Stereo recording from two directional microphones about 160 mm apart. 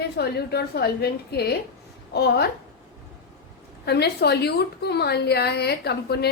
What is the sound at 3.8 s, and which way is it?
A woman's voice, 90° left.